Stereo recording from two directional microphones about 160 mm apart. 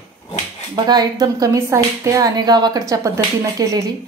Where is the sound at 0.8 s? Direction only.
25° right (ahead or behind).